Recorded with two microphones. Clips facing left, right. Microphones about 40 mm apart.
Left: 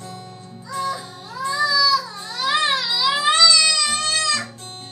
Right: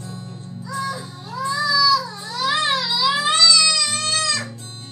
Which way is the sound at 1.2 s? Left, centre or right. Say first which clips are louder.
Left 1 dB; centre.